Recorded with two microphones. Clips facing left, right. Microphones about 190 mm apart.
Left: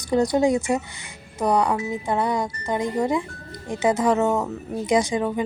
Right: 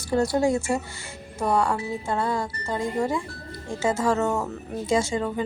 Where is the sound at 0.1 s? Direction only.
20° left (ahead or behind).